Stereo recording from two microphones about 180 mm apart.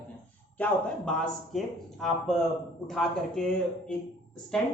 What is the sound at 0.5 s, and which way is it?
Speech, 10° left (ahead or behind).